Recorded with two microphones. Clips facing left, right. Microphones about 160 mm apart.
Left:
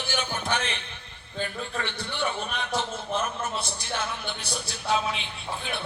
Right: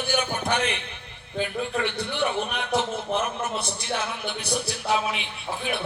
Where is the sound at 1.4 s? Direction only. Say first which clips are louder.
Right 5 dB; 15° right (ahead or behind).